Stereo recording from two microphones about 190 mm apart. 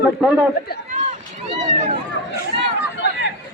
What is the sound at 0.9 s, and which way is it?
Run, 40° right (ahead or behind).